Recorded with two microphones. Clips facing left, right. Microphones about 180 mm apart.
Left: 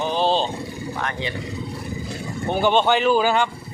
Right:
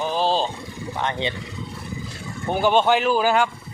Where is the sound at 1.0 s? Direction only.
20° right (ahead or behind).